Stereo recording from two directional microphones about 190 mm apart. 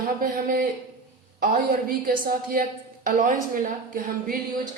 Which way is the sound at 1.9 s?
50° right (ahead or behind).